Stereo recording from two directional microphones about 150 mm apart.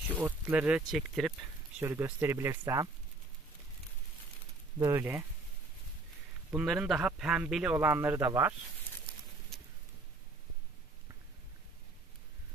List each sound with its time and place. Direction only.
0.1 s speech: 10° right (ahead or behind)
1.8 s speech: 15° right (ahead or behind)
4.7 s speech: 20° right (ahead or behind)
6.5 s speech: 5° right (ahead or behind)
9.5 s a sound: centre (ahead or behind)